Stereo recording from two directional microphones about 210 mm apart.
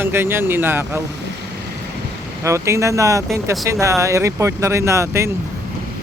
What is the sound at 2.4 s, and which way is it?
Speech, 15° right (ahead or behind).